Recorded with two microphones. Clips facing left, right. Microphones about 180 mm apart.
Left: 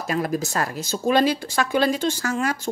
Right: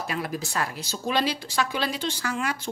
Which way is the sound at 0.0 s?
45° left (ahead or behind).